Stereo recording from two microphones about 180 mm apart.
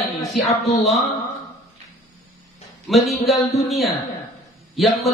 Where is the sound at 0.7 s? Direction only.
35° left (ahead or behind).